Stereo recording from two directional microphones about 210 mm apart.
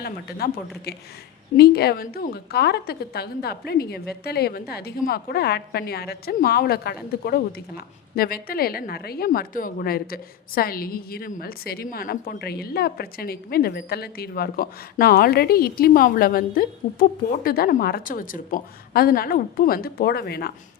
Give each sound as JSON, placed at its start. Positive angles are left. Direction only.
{"t": 0.0, "sound": "a woman's voice", "side_deg": 50}
{"t": 1.5, "sound": "a woman's voice", "side_deg": 50}